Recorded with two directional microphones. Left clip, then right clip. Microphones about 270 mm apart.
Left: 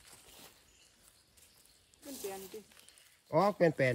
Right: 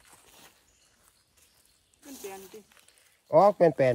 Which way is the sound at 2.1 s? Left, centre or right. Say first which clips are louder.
Right 1 dB; right.